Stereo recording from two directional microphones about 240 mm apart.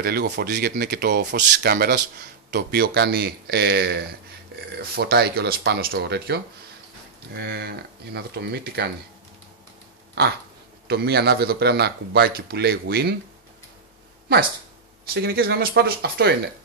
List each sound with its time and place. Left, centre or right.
0.0 s speech: right
10.2 s speech: right
15.1 s speech: right